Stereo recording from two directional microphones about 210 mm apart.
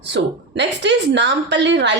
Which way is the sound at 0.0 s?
55° right (ahead or behind).